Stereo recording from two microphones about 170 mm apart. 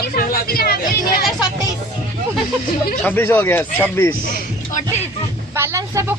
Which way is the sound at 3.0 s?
10° left (ahead or behind).